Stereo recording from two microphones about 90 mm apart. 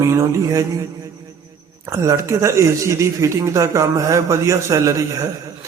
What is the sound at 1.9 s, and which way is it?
Speech, 35° right (ahead or behind).